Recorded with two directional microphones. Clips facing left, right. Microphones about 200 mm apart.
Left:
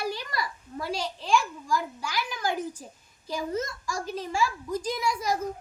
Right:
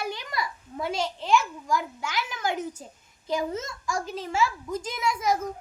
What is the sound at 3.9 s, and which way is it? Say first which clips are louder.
A child's voice: right 1 dB; 25° right (ahead or behind).